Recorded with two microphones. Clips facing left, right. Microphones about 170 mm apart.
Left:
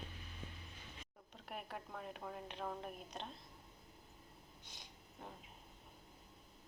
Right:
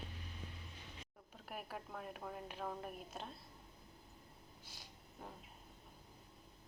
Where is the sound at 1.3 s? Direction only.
5° right (ahead or behind).